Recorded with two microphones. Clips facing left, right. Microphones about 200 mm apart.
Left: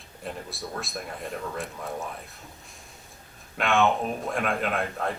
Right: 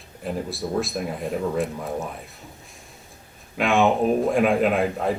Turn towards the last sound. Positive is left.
turn(degrees=0)  # may be behind; listen again after turning